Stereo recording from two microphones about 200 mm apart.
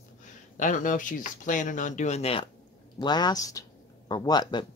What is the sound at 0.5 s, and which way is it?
Speech, 40° left (ahead or behind).